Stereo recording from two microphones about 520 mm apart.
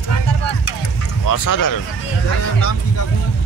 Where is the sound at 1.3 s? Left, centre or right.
Left.